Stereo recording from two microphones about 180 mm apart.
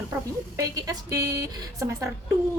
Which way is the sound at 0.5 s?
20° right (ahead or behind).